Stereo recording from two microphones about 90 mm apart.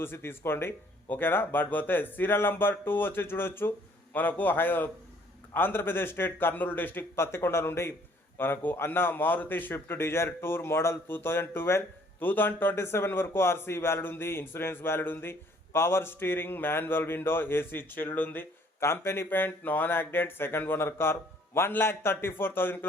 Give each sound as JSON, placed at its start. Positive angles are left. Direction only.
{"t": 0.0, "sound": "a man's voice", "side_deg": 25}